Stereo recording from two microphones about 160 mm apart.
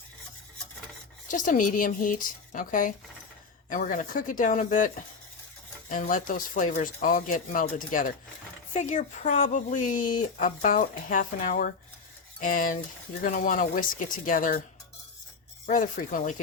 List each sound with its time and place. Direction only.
1.3 s speech: 55° left (ahead or behind)
15.6 s speech: 55° left (ahead or behind)